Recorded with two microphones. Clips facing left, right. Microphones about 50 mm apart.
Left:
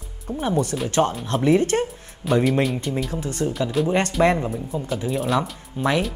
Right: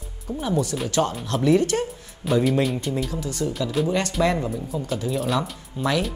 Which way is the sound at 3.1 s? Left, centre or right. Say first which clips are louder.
Left 2 dB; left.